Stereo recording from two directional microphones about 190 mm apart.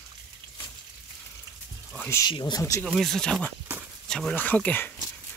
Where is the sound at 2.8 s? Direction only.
Centre (ahead or behind).